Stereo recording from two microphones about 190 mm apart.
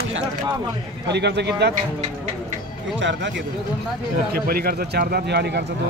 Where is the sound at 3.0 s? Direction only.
70° right (ahead or behind).